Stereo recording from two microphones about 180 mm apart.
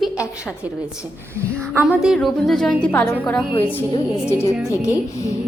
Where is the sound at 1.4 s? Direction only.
10° right (ahead or behind).